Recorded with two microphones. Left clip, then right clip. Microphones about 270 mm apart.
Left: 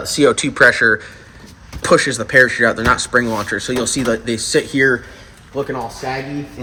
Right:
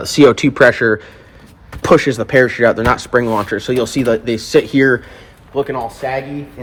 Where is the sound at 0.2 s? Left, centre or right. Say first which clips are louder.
Right 3 dB; right.